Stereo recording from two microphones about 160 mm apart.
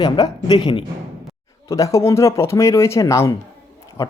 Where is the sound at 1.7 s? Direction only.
20° left (ahead or behind).